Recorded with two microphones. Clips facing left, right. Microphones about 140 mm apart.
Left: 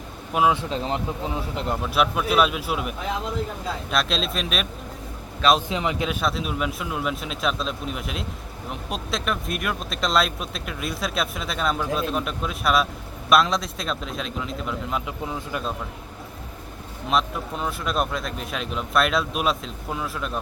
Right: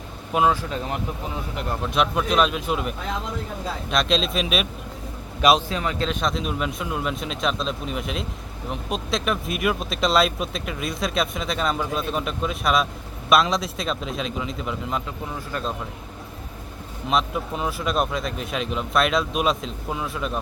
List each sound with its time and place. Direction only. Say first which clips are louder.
0.5 s speech: left 2 dB; 25° left (ahead or behind)
1.8 s speech: right 1 dB; 5° left (ahead or behind)
5.6 s speech: even; 20° left (ahead or behind); by 15.0 s centre (ahead or behind)
17.1 s speech: right 1 dB; centre (ahead or behind)